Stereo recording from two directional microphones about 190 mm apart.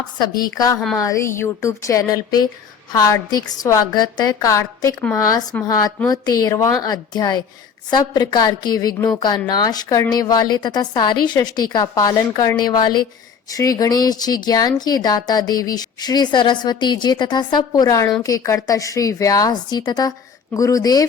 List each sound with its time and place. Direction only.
0.2 s a woman's voice: 20° left (ahead or behind)